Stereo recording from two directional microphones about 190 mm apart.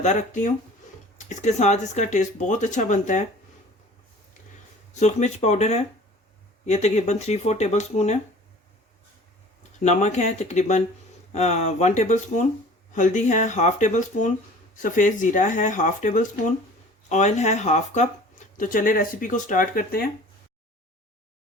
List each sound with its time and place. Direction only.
0.0 s speech: 35° left (ahead or behind)
4.9 s speech: 35° left (ahead or behind)
9.8 s speech: 35° left (ahead or behind)